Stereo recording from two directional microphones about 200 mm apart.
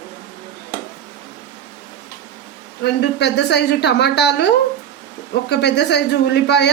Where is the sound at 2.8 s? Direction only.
60° left (ahead or behind).